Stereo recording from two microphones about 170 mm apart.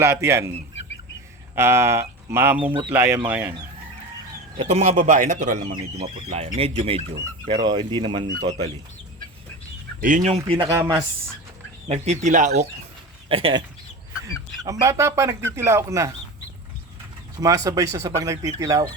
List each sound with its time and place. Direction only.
0.0 s speech: 15° right (ahead or behind)
1.5 s speech: 15° right (ahead or behind)
4.5 s speech: 35° right (ahead or behind)
10.0 s speech: 50° right (ahead or behind)
10.3 s speech: 35° right (ahead or behind)
11.9 s speech: 40° right (ahead or behind)
13.2 s speech: 30° right (ahead or behind)
17.4 s speech: 20° right (ahead or behind)